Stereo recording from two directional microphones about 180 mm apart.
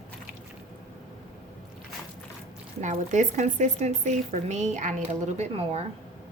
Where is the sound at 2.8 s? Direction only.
45° right (ahead or behind).